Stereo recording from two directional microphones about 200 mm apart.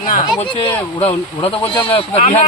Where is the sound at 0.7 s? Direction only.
10° left (ahead or behind).